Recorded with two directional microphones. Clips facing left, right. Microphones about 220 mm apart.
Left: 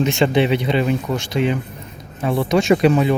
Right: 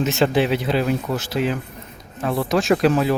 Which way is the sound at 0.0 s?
5° right (ahead or behind).